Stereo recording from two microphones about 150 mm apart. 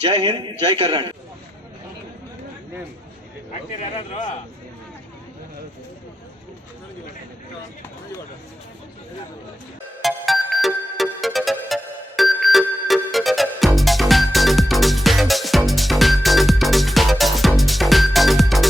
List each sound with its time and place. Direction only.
0.0 s a man's voice: 30° right (ahead or behind)
3.9 s a man's voice: 40° left (ahead or behind)
10.0 s music: centre (ahead or behind)